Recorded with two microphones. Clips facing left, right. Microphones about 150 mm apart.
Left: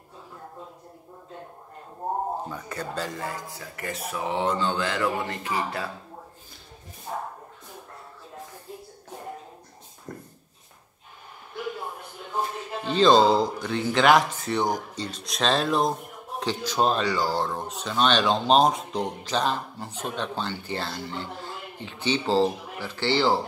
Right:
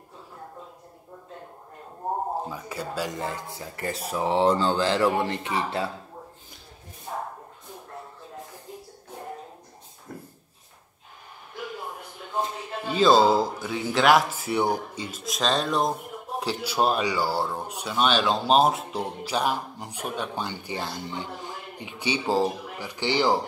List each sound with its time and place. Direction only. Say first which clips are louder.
2.5 s speech: even; 5° right (ahead or behind)
3.2 s speech: right 2 dB; 25° right (ahead or behind)
12.4 s a man's voice: left 1 dB; 10° right (ahead or behind)